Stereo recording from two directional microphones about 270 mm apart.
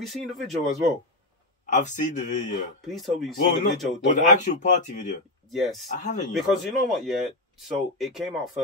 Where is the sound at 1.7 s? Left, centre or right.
Left.